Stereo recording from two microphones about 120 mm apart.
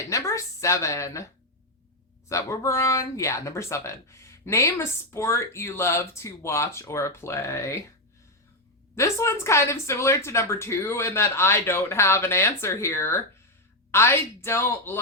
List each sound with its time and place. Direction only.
0.1 s speech: 25° left (ahead or behind)
2.3 s speech: 25° left (ahead or behind)
9.0 s speech: 25° left (ahead or behind)